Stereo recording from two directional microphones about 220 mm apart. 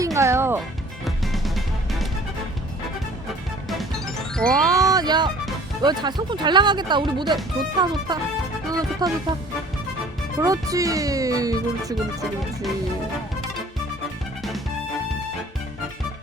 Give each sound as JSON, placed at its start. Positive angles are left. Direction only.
{"t": 0.0, "sound": "music", "side_deg": -15}
{"t": 1.0, "sound": "music", "side_deg": 0}
{"t": 3.7, "sound": "music", "side_deg": 0}
{"t": 4.6, "sound": "wind chime", "side_deg": -15}
{"t": 5.8, "sound": "speech", "side_deg": -20}
{"t": 10.4, "sound": "speech", "side_deg": -15}